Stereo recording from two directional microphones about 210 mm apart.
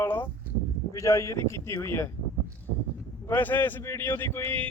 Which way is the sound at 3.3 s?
10° left (ahead or behind).